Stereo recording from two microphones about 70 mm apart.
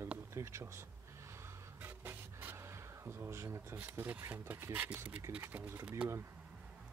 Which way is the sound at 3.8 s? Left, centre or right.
Right.